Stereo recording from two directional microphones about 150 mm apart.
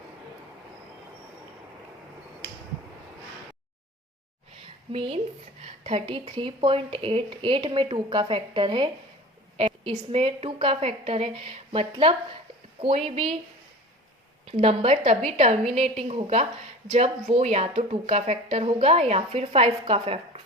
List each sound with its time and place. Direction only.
4.9 s a woman's voice: 35° right (ahead or behind)
14.4 s a woman's voice: 40° right (ahead or behind)